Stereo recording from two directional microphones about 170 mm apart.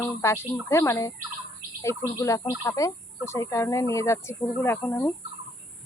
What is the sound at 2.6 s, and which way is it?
Speech, 20° left (ahead or behind).